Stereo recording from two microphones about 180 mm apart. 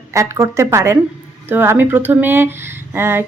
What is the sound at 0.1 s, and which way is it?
Speech, 15° right (ahead or behind).